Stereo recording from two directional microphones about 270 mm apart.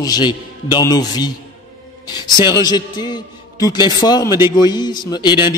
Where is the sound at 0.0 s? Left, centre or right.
Centre.